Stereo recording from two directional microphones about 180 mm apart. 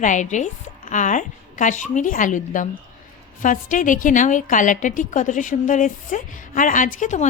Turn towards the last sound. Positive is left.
turn(degrees=45)  # may be behind; listen again after turning